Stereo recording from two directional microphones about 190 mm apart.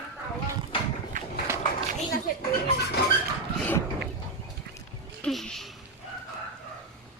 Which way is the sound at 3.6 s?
10° left (ahead or behind).